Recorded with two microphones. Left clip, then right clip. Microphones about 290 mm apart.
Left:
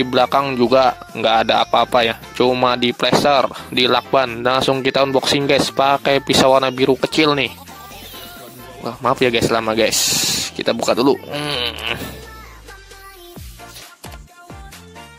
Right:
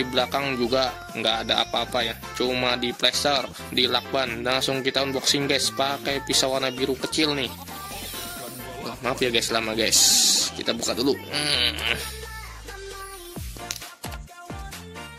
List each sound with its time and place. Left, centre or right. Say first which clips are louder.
0.0 s speech: left 9 dB; left
8.8 s speech: left 9 dB; left